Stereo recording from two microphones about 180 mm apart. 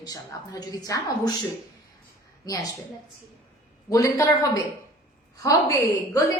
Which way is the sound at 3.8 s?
20° left (ahead or behind).